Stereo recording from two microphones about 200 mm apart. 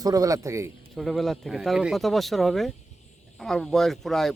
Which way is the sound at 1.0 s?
Centre (ahead or behind).